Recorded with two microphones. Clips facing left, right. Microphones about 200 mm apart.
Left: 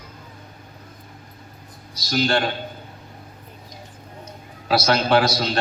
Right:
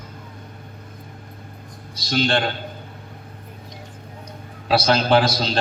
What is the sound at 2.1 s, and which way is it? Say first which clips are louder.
Speech: even; 30° right (ahead or behind).